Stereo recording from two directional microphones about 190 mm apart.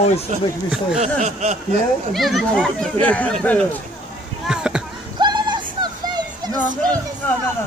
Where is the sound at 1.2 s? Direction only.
40° right (ahead or behind).